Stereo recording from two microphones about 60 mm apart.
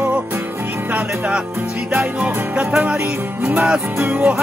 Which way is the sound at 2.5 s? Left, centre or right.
Centre.